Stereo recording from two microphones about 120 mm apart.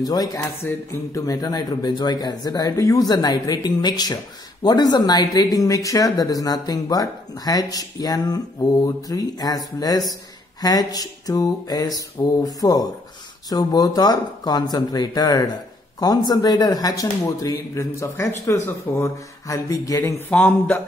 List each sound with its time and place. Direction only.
0.0 s speech: 30° left (ahead or behind)
20.2 s a man's voice: 15° left (ahead or behind)